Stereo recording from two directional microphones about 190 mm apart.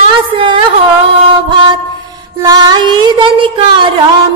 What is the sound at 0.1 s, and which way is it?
Music, 25° right (ahead or behind).